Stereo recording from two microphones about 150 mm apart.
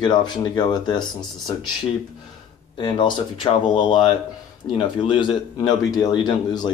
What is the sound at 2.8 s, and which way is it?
Speech, 30° left (ahead or behind).